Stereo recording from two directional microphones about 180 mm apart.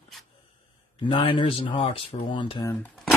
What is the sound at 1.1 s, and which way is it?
Speech, 30° left (ahead or behind).